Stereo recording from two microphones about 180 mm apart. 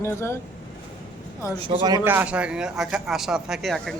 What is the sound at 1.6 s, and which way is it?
Speech, 20° right (ahead or behind).